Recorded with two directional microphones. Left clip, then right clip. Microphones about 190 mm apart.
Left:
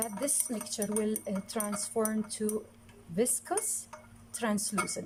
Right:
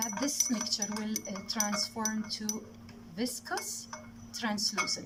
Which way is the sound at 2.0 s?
45° left (ahead or behind).